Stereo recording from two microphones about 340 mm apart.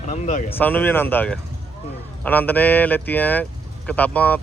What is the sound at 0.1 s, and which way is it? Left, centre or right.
Speech, left.